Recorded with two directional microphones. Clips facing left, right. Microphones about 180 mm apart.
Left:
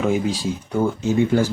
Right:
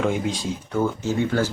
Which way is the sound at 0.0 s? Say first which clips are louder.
Left 3 dB; 5° left (ahead or behind).